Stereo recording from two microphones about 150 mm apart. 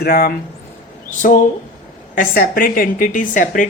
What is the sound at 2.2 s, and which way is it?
A woman's voice, 70° left (ahead or behind).